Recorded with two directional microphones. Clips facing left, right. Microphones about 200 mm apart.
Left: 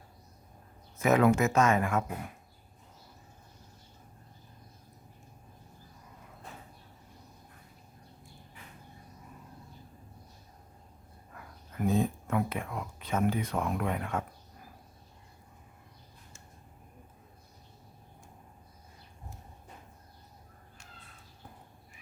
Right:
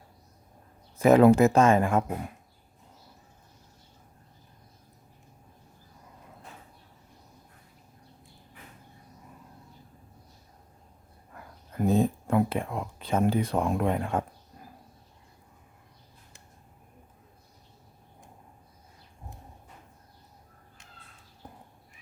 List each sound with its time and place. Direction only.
0.9 s speech: 30° right (ahead or behind)
11.7 s speech: 35° right (ahead or behind)